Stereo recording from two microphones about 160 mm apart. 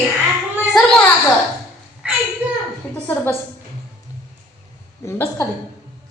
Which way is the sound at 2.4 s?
10° right (ahead or behind).